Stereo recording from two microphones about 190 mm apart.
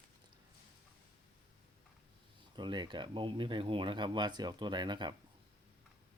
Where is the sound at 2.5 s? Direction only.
25° right (ahead or behind).